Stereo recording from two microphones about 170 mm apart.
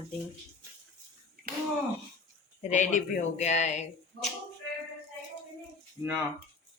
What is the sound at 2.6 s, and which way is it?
Speech, 45° left (ahead or behind).